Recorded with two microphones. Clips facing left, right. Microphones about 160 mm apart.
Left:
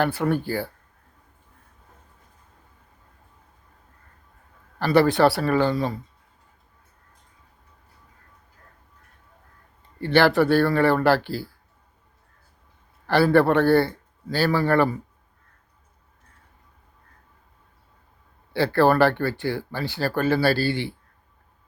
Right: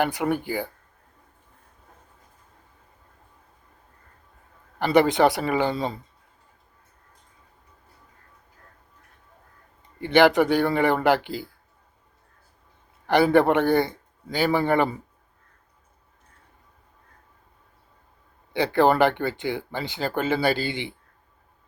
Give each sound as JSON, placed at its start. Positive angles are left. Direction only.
{"t": 0.0, "sound": "speech", "side_deg": -15}
{"t": 4.8, "sound": "speech", "side_deg": -20}
{"t": 10.0, "sound": "speech", "side_deg": -15}
{"t": 13.1, "sound": "speech", "side_deg": -20}
{"t": 18.5, "sound": "speech", "side_deg": -20}